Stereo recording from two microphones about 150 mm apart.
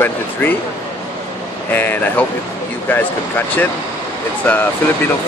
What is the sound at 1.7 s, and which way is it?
Speech, 10° left (ahead or behind).